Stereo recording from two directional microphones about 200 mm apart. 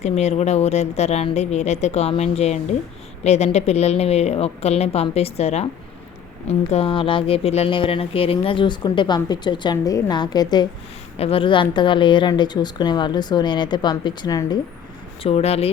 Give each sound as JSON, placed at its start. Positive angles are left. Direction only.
{"t": 0.0, "sound": "speech", "side_deg": 35}
{"t": 15.2, "sound": "speech", "side_deg": 30}